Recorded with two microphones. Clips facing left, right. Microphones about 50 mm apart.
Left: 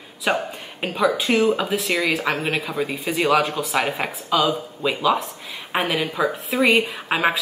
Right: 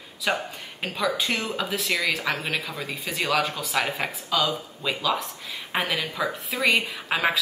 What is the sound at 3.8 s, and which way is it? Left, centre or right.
Speech, centre.